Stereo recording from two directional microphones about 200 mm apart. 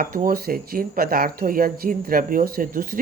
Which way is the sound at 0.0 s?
45° right (ahead or behind).